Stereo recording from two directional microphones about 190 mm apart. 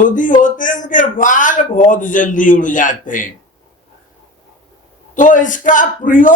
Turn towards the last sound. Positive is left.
turn(degrees=45)  # may be behind; listen again after turning